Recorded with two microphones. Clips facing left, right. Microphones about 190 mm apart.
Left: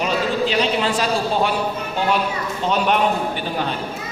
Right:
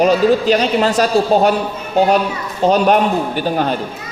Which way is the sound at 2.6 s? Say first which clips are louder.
Right 8 dB; 40° right (ahead or behind).